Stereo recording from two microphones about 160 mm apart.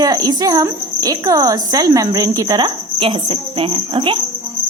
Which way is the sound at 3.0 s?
30° right (ahead or behind).